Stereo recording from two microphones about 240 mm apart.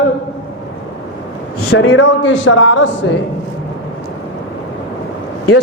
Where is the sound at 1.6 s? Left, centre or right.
Left.